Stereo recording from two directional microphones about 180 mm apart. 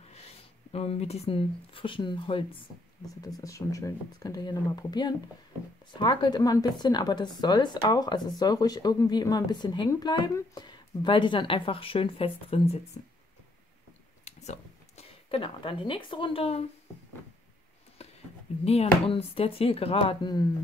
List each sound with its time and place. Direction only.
0.7 s speech: 35° left (ahead or behind)
14.2 s speech: 40° left (ahead or behind)
18.6 s speech: 35° left (ahead or behind)